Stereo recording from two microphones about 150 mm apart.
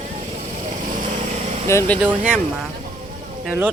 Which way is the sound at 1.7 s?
20° left (ahead or behind).